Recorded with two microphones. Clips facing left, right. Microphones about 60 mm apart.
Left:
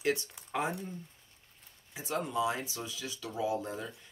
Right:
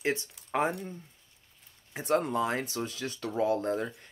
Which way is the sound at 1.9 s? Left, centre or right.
Right.